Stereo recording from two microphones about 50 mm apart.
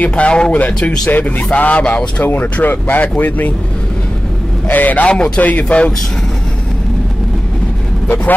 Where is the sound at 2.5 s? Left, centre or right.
Left.